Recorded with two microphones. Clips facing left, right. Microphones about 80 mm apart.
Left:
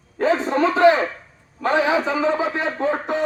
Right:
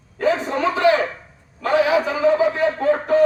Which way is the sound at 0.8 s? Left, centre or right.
Left.